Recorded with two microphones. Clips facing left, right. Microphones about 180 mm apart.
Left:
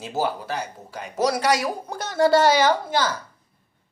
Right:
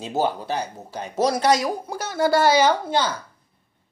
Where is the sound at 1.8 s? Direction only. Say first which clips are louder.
Left 5 dB; 5° right (ahead or behind).